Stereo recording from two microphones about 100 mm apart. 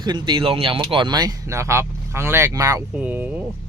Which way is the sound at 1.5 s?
30° right (ahead or behind).